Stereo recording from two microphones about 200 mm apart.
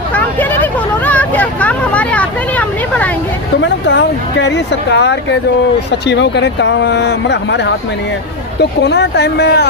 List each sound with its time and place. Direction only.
0.1 s vehicle: 10° left (ahead or behind)
3.6 s speech: 65° left (ahead or behind)
8.8 s speech: 55° left (ahead or behind)